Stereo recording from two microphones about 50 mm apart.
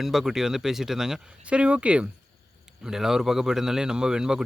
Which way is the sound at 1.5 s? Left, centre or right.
Right.